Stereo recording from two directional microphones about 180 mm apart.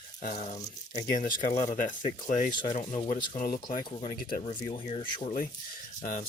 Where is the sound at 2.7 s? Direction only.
45° left (ahead or behind).